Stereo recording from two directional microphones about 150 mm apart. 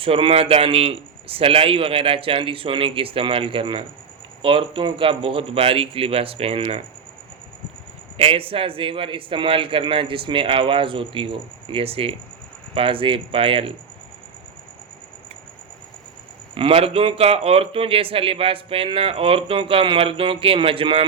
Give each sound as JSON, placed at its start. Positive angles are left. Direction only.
{"t": 0.0, "sound": "a man's voice", "side_deg": -35}
{"t": 8.2, "sound": "a man's voice", "side_deg": -40}
{"t": 16.6, "sound": "a man's voice", "side_deg": -40}